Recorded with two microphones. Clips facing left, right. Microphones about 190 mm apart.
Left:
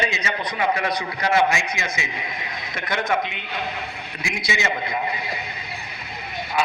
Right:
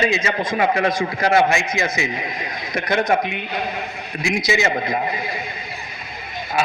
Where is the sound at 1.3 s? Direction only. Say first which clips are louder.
Right 2 dB; 30° right (ahead or behind).